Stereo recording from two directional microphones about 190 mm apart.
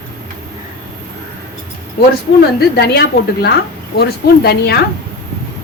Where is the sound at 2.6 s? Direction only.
60° left (ahead or behind).